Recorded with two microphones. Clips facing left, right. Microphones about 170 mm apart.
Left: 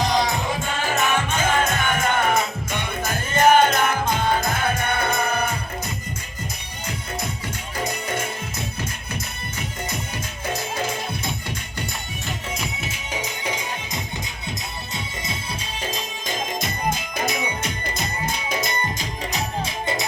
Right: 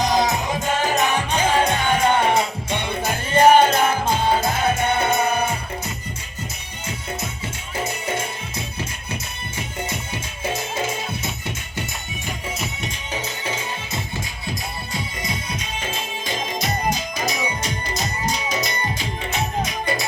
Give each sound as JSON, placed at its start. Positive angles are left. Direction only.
{"t": 0.1, "sound": "music", "side_deg": -45}
{"t": 12.5, "sound": "music", "side_deg": 5}
{"t": 14.9, "sound": "music", "side_deg": 25}
{"t": 19.6, "sound": "music", "side_deg": 20}